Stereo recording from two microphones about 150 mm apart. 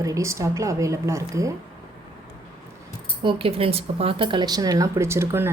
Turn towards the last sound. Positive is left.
turn(degrees=-15)  # may be behind; listen again after turning